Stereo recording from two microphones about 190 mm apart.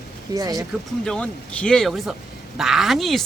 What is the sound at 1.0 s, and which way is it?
Speech, 5° left (ahead or behind).